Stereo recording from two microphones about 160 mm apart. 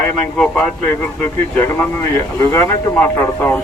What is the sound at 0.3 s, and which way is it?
Speech, 5° left (ahead or behind).